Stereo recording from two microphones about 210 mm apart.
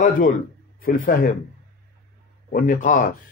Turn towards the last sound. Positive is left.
turn(degrees=35)  # may be behind; listen again after turning